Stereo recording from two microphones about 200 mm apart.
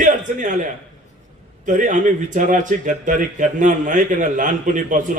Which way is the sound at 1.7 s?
40° right (ahead or behind).